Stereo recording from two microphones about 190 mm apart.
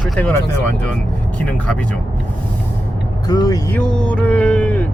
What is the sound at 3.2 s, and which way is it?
Speech, 20° left (ahead or behind).